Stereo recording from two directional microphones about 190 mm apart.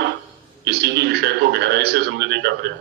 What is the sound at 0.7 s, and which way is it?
Frog, 60° right (ahead or behind).